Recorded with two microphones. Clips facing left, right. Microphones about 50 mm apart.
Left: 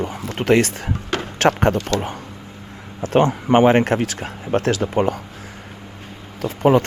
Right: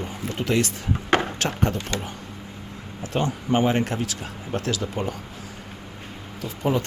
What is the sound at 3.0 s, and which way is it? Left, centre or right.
Speech, left.